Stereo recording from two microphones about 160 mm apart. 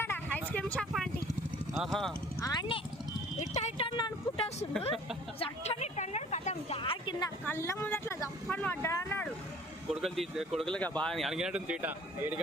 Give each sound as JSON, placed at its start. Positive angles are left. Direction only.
{"t": 0.0, "sound": "vehicle", "side_deg": 10}
{"t": 1.7, "sound": "speech", "side_deg": 0}
{"t": 2.4, "sound": "speech", "side_deg": 25}
{"t": 3.3, "sound": "speech", "side_deg": 45}
{"t": 3.9, "sound": "speech", "side_deg": 25}
{"t": 5.4, "sound": "speech", "side_deg": 45}
{"t": 7.4, "sound": "speech", "side_deg": 15}
{"t": 10.0, "sound": "speech", "side_deg": 0}